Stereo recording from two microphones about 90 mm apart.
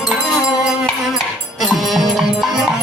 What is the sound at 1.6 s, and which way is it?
Music, centre (ahead or behind).